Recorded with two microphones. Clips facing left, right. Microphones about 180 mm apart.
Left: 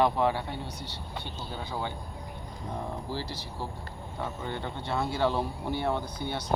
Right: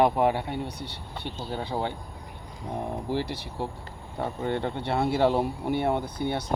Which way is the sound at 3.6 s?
65° right (ahead or behind).